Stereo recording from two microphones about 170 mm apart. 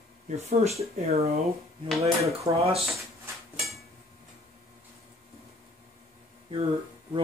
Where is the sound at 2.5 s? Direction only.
35° right (ahead or behind).